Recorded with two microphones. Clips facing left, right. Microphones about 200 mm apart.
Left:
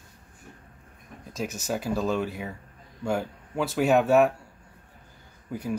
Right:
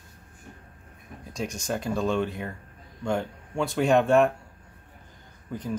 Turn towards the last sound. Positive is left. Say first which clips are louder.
# left 1 dB
turn(degrees=10)  # may be behind; listen again after turning